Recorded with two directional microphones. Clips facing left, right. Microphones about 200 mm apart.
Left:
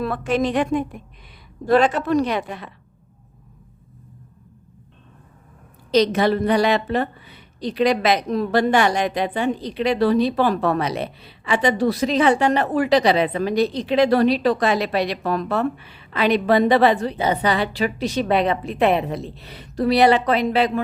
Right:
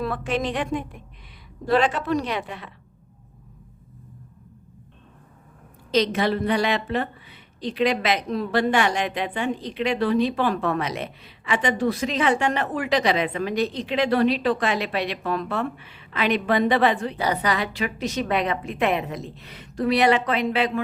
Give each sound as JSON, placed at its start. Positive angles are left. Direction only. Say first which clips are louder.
{"t": 0.0, "sound": "a woman's voice", "louder": "left 4 dB", "side_deg": 45}
{"t": 5.9, "sound": "a woman's voice", "louder": "left 4 dB", "side_deg": 40}
{"t": 17.2, "sound": "a woman's voice", "louder": "left 4 dB", "side_deg": 25}